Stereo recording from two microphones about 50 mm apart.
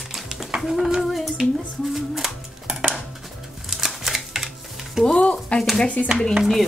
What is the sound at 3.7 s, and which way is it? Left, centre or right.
Typewriter, centre.